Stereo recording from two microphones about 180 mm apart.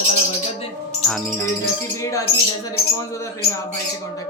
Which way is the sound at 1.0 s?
5° left (ahead or behind).